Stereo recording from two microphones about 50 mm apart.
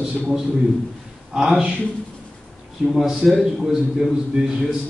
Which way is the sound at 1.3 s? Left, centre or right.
Centre.